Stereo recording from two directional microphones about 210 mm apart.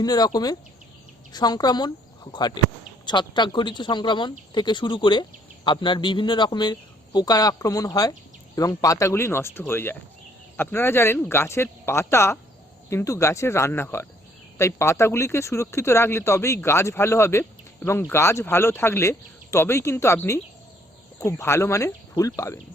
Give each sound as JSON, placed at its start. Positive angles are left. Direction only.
{"t": 0.0, "sound": "speech", "side_deg": 20}